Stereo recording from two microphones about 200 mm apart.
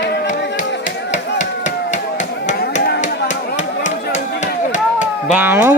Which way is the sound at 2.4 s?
55° left (ahead or behind).